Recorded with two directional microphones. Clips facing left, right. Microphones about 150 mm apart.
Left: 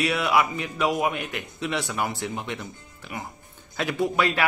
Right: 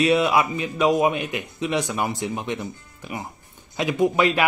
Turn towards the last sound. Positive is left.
turn(degrees=-20)  # may be behind; listen again after turning